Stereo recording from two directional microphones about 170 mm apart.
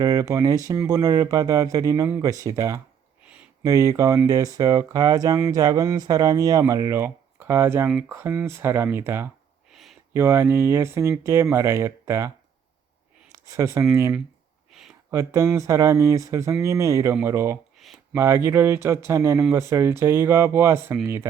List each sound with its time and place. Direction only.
0.0 s speech: 20° right (ahead or behind)
7.9 s speech: 5° right (ahead or behind)
8.1 s speech: 15° right (ahead or behind)
9.7 s a sound: centre (ahead or behind)
10.2 s speech: 15° right (ahead or behind)
13.3 s speech: 15° right (ahead or behind)
14.7 s a sound: centre (ahead or behind)
15.1 s speech: 15° right (ahead or behind)